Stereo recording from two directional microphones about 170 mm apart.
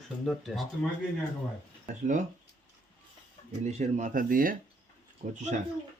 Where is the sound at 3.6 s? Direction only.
45° right (ahead or behind).